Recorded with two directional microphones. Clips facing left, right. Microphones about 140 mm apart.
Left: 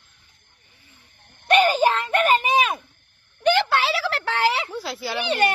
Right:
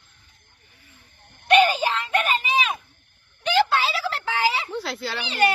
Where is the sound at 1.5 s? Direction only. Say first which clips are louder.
Left 1 dB; 45° left (ahead or behind); by 4.5 s 70° left (ahead or behind).